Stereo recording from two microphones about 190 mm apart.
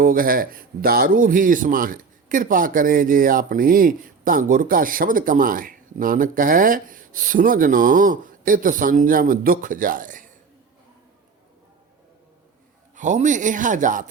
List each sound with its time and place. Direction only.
0.0 s a man's voice: 45° right (ahead or behind)
13.0 s speech: 40° right (ahead or behind)